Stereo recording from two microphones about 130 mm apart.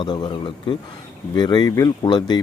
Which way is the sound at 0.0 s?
35° left (ahead or behind).